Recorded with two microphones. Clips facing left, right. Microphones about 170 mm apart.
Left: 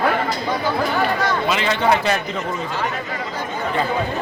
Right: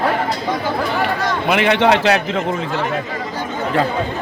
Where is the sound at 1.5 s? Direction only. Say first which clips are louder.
Right 7 dB; 65° right (ahead or behind).